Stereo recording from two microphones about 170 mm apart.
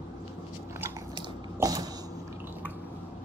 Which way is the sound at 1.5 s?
20° right (ahead or behind).